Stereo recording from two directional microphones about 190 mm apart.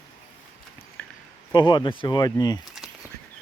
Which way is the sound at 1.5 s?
25° left (ahead or behind).